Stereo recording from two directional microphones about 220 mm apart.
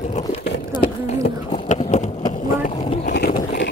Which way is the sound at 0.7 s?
20° left (ahead or behind).